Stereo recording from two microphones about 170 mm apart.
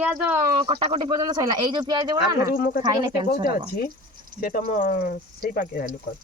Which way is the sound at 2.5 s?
55° left (ahead or behind).